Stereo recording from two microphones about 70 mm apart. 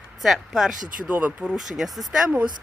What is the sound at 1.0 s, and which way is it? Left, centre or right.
Speech, right.